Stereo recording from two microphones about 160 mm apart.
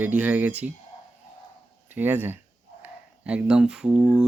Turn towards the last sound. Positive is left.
turn(degrees=-5)  # may be behind; listen again after turning